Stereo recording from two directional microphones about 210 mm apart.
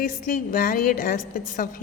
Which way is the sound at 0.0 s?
40° left (ahead or behind).